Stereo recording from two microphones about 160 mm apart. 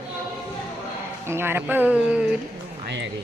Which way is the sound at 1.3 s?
15° right (ahead or behind).